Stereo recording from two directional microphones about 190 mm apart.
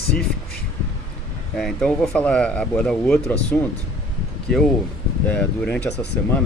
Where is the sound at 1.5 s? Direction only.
Centre (ahead or behind).